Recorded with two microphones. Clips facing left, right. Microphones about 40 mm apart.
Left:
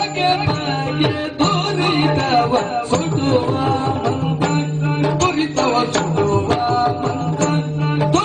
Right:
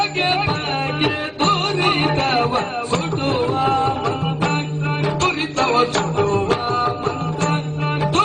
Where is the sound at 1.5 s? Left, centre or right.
Right.